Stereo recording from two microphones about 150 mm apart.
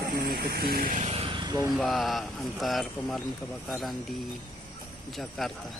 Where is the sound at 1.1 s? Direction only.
40° right (ahead or behind).